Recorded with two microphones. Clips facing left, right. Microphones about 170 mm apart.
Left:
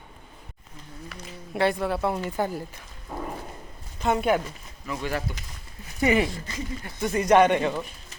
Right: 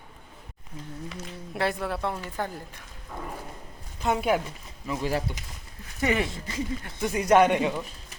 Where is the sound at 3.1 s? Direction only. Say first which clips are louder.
Left 4 dB; 15° left (ahead or behind).